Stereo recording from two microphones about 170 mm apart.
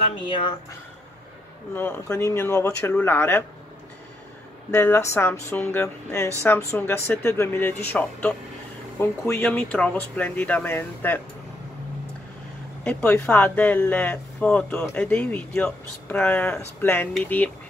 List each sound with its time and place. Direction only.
0.3 s speech: 30° left (ahead or behind)
1.8 s speech: 15° left (ahead or behind)
4.6 s speech: 15° left (ahead or behind)
12.8 s speech: 5° left (ahead or behind)